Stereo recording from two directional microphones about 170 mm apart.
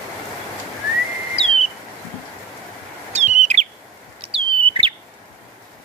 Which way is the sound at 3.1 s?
45° right (ahead or behind).